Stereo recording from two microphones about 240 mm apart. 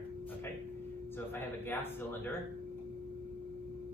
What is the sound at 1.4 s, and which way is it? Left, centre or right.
Speech, centre.